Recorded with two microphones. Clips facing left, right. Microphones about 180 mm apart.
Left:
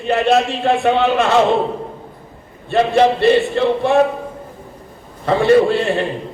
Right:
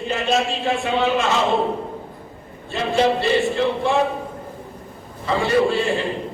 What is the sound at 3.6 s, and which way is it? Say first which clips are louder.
Speech: left 4 dB; 60° left (ahead or behind).